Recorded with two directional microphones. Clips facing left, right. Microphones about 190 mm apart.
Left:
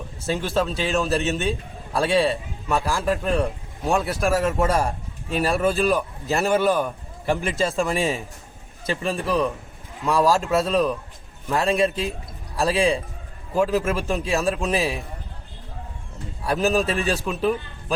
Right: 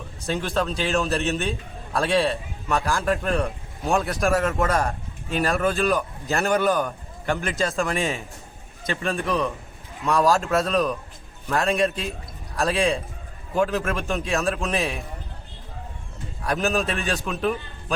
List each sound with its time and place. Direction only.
0.3 s a man's voice: centre (ahead or behind)
13.5 s a man's voice: 5° left (ahead or behind)
16.4 s a man's voice: 5° left (ahead or behind)
16.9 s a man's voice: 35° left (ahead or behind)
17.2 s a man's voice: centre (ahead or behind)